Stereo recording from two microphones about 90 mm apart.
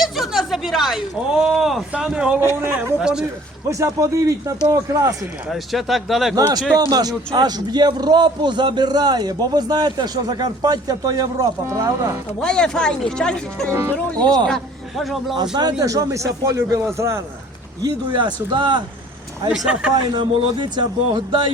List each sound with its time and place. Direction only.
0.0 s speech: 5° right (ahead or behind)
2.4 s a man's voice: 25° right (ahead or behind)
3.0 s speech: 10° right (ahead or behind)
3.7 s speech: 35° right (ahead or behind)
5.5 s speech: centre (ahead or behind)
6.9 s a man's voice: 45° right (ahead or behind)
12.4 s speech: 10° left (ahead or behind)
14.2 s a man's voice: 50° right (ahead or behind)
14.4 s a man's voice: 5° left (ahead or behind)
15.8 s speech: 40° right (ahead or behind)
18.2 s speech: 60° right (ahead or behind)
19.5 s speech: 10° right (ahead or behind)
19.9 s speech: 50° right (ahead or behind)